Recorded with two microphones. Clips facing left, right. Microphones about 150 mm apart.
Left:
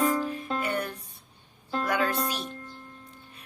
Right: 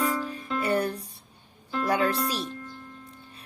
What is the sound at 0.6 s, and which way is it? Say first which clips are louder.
Speech: right 5 dB; 35° right (ahead or behind).